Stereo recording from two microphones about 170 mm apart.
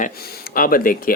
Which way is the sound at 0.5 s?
55° left (ahead or behind).